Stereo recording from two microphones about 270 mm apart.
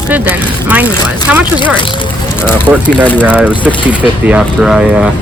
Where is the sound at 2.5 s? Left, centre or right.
Centre.